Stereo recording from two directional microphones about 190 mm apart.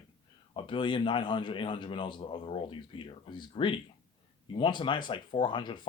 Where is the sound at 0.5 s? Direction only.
25° left (ahead or behind).